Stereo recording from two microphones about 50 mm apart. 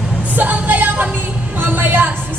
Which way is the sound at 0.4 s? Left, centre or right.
Right.